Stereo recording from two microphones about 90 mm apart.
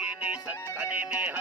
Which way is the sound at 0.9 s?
20° right (ahead or behind).